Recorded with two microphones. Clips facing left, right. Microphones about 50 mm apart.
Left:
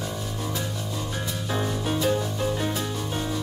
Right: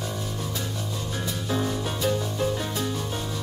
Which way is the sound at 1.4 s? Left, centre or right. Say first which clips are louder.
Even; centre.